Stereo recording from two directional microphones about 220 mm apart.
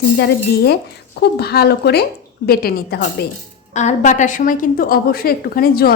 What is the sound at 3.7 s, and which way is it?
A woman's voice, 35° left (ahead or behind).